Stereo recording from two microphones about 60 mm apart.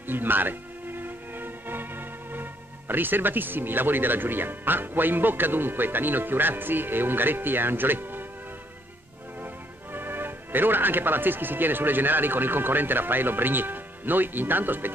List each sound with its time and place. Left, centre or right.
0.0 s speech: right
9.9 s speech: right